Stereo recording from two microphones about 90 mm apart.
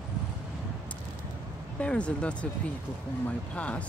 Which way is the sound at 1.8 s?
15° left (ahead or behind).